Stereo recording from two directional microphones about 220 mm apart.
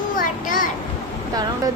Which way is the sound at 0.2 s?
35° left (ahead or behind).